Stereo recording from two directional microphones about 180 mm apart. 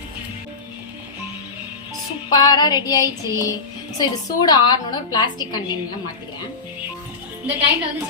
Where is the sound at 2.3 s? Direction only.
25° left (ahead or behind).